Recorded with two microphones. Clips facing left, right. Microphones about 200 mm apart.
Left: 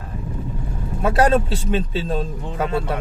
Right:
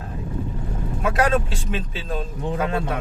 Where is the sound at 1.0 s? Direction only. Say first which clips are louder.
Left 4 dB; 35° left (ahead or behind).